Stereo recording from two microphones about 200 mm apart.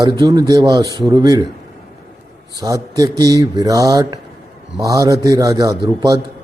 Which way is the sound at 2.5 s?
15° right (ahead or behind).